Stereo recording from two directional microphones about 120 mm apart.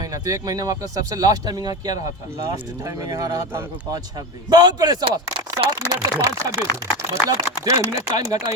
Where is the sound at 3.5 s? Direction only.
20° right (ahead or behind).